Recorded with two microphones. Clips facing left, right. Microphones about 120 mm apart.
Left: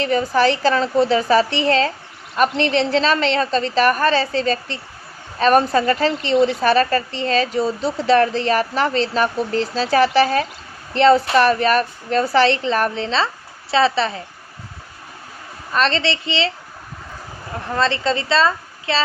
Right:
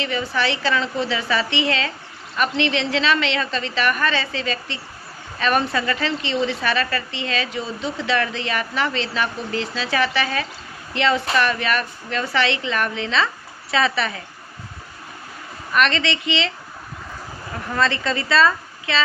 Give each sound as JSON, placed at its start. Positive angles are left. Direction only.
{"t": 0.0, "sound": "a woman's voice", "side_deg": 40}
{"t": 15.7, "sound": "a woman's voice", "side_deg": 30}
{"t": 17.7, "sound": "a woman's voice", "side_deg": 30}